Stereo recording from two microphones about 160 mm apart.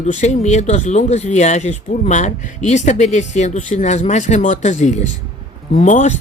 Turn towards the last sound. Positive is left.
turn(degrees=50)  # may be behind; listen again after turning